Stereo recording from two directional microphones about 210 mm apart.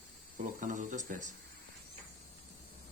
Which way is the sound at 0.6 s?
40° right (ahead or behind).